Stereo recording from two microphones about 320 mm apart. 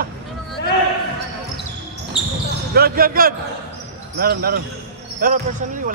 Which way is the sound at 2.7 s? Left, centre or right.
Right.